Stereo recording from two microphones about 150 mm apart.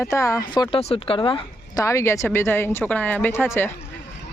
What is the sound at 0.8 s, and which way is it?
Speech, 40° left (ahead or behind).